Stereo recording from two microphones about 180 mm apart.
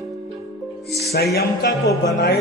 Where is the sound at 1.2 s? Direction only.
65° left (ahead or behind).